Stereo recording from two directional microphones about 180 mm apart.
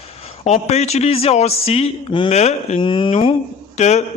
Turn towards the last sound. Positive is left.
turn(degrees=40)  # may be behind; listen again after turning